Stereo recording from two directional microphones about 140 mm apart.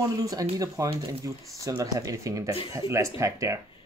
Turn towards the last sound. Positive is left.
turn(degrees=-20)  # may be behind; listen again after turning